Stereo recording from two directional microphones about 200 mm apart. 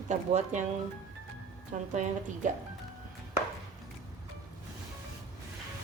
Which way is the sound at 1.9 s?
35° right (ahead or behind).